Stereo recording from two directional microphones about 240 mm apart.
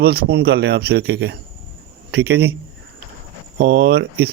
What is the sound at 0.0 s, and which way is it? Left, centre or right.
A man's voice, right.